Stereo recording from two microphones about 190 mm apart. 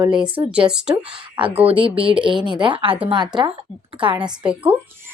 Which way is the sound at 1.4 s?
30° right (ahead or behind).